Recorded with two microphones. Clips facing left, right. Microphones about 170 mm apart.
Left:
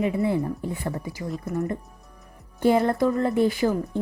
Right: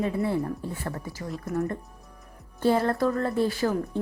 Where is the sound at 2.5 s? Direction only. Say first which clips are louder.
Left 3 dB; 15° left (ahead or behind).